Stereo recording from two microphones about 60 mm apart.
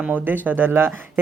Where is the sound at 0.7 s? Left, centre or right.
Right.